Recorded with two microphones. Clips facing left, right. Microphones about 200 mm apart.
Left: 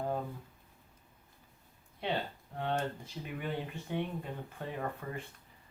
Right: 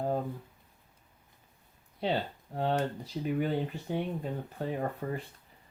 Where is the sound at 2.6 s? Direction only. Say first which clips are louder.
Right 5 dB; 35° right (ahead or behind).